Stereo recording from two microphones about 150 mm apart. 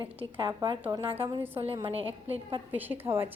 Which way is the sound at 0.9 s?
20° right (ahead or behind).